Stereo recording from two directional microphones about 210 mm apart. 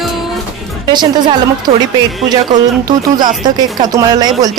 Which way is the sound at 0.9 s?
20° right (ahead or behind).